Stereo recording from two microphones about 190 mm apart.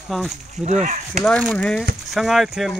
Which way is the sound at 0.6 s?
40° right (ahead or behind).